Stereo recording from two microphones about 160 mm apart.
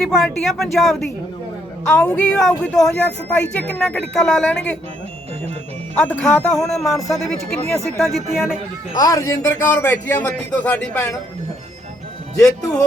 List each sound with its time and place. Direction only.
0.0 s speech: 5° left (ahead or behind)
5.9 s a man's voice: 10° left (ahead or behind)
7.8 s a man's voice: 15° left (ahead or behind)
8.1 s speech: centre (ahead or behind)
9.0 s a man's voice: 20° left (ahead or behind)